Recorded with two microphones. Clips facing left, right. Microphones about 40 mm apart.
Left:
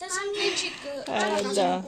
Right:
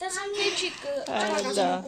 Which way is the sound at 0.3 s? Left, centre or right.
Centre.